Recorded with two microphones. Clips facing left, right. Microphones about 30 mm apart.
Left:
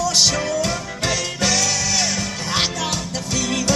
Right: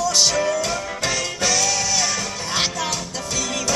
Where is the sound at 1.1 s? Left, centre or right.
Left.